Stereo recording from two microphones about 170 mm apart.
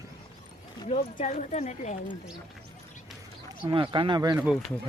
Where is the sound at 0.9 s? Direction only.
40° left (ahead or behind).